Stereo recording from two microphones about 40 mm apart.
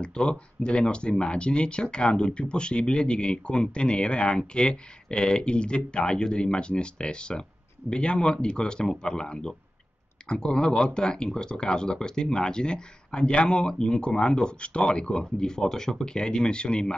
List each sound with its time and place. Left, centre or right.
0.0 s speech: left